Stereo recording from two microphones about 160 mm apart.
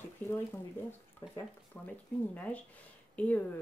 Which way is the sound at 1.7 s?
10° left (ahead or behind).